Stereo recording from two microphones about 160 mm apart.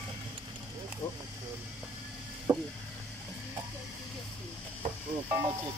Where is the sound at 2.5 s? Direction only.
25° right (ahead or behind).